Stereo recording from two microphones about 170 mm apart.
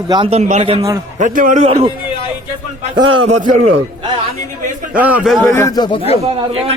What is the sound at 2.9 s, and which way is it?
Speech, 45° right (ahead or behind).